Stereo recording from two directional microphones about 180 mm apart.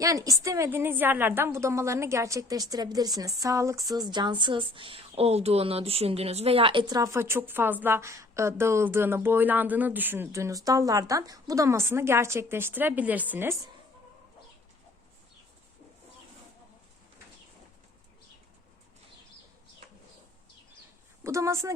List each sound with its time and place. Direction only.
0.0 s a woman's voice: 20° right (ahead or behind)
21.2 s a woman's voice: 15° right (ahead or behind)